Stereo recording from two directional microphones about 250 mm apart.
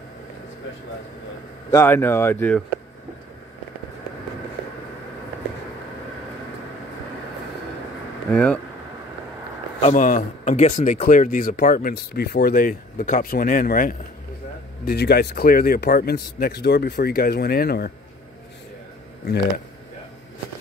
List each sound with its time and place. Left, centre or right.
1.7 s speech: centre
8.3 s speech: centre
9.8 s speech: left